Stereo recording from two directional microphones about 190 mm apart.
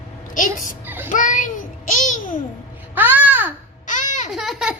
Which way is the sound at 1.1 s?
40° left (ahead or behind).